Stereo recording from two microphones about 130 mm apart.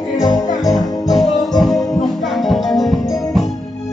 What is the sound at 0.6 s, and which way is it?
Speech, centre (ahead or behind).